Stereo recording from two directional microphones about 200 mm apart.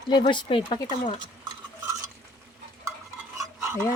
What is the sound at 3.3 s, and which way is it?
Stir, 15° right (ahead or behind).